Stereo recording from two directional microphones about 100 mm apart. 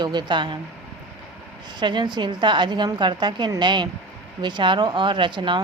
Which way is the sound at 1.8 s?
50° right (ahead or behind).